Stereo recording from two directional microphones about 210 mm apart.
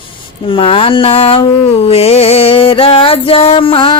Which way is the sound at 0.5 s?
25° left (ahead or behind).